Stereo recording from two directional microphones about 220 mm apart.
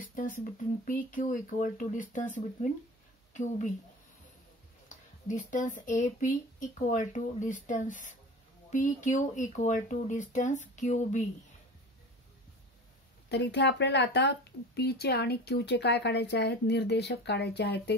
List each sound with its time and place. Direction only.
0.1 s speech: 35° left (ahead or behind)
4.8 s speech: 35° left (ahead or behind)
13.3 s speech: 50° left (ahead or behind)